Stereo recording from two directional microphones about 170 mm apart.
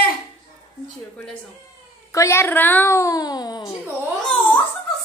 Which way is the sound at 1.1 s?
5° left (ahead or behind).